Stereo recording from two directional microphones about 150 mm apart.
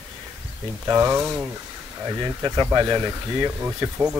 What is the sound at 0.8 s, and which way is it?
Speech, 15° right (ahead or behind).